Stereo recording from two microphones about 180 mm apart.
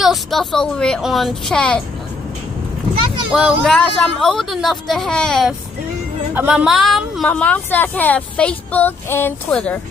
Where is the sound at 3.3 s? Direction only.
5° right (ahead or behind).